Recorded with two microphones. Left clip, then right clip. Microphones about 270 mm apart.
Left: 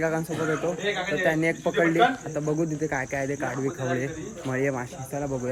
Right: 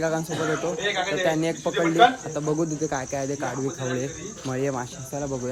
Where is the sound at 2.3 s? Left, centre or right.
Centre.